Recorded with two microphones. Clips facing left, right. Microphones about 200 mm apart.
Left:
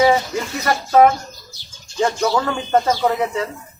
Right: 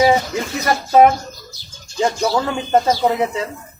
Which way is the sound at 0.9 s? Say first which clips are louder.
Right 1 dB; 20° right (ahead or behind).